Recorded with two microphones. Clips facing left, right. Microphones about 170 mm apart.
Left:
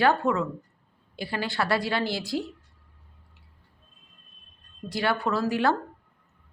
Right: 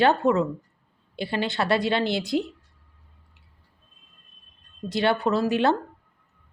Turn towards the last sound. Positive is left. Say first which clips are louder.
# right 3 dB
turn(degrees=-20)  # may be behind; listen again after turning